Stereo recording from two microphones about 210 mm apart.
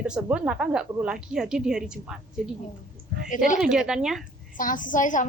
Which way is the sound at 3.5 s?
5° right (ahead or behind).